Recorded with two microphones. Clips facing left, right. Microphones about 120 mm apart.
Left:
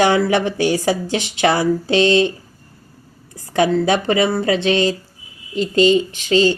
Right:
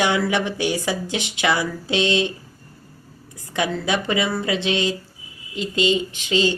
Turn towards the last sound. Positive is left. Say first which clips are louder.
# left 5 dB
turn(degrees=40)  # may be behind; listen again after turning